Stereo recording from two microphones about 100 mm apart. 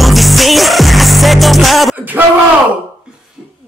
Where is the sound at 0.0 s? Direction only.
Centre (ahead or behind).